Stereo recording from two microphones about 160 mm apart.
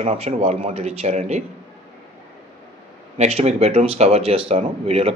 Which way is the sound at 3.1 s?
40° right (ahead or behind).